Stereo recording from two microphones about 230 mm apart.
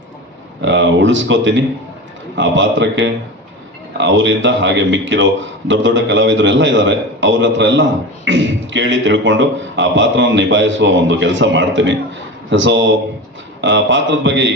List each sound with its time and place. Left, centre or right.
0.6 s a man's voice: right